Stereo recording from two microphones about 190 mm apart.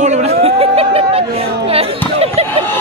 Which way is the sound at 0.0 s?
35° right (ahead or behind).